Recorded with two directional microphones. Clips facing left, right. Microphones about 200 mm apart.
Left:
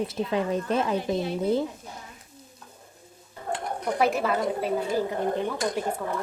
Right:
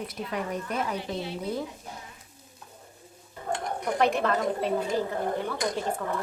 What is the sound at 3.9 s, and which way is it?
A woman's voice, 5° left (ahead or behind).